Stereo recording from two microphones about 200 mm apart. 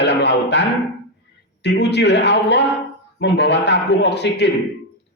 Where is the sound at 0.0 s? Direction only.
60° left (ahead or behind).